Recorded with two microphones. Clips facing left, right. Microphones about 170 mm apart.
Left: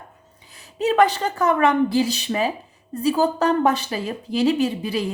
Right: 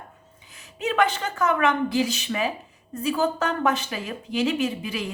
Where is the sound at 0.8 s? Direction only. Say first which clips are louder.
Left 5 dB; 35° left (ahead or behind).